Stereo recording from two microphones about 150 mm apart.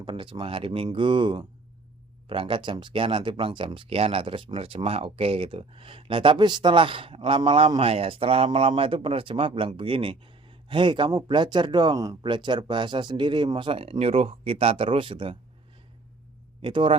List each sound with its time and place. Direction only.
0.0 s speech: 35° right (ahead or behind)
16.6 s speech: 35° right (ahead or behind)